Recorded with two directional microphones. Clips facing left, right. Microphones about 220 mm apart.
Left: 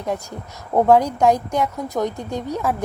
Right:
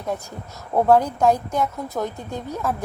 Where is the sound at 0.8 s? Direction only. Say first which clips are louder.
Left 2 dB; 15° left (ahead or behind).